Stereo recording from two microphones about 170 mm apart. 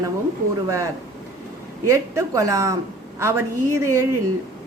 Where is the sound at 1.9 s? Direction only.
20° right (ahead or behind).